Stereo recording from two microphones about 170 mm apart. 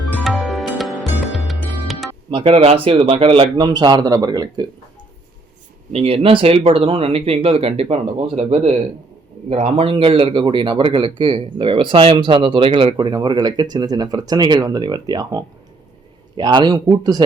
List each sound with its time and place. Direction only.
0.0 s music: centre (ahead or behind)
2.3 s speech: 35° right (ahead or behind)
5.9 s speech: 35° right (ahead or behind)